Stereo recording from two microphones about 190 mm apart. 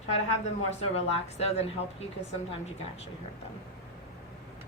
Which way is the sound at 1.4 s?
35° left (ahead or behind).